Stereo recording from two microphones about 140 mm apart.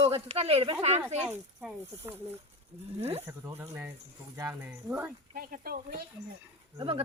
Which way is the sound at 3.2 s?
20° right (ahead or behind).